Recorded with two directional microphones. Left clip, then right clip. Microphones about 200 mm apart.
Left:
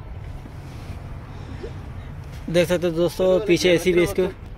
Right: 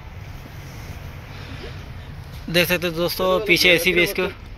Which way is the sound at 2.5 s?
20° left (ahead or behind).